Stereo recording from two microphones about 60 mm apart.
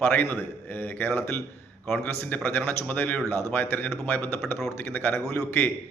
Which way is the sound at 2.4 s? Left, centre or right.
Left.